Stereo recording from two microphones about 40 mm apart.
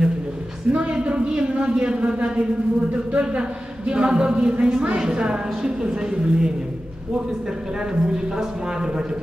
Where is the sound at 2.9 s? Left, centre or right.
Right.